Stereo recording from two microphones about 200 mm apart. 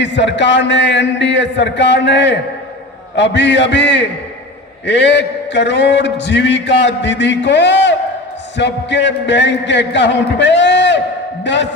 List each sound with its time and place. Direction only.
0.0 s a man's voice: 60° left (ahead or behind)